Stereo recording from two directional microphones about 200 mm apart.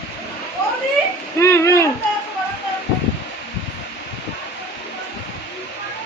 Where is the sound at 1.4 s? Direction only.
15° left (ahead or behind).